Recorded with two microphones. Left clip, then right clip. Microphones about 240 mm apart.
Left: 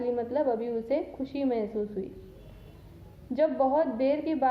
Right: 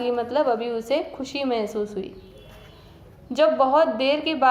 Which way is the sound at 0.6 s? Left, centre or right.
Centre.